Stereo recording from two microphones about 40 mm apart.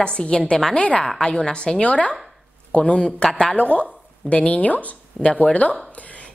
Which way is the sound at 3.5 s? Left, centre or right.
Left.